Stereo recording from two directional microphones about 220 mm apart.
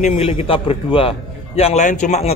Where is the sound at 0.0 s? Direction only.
30° left (ahead or behind).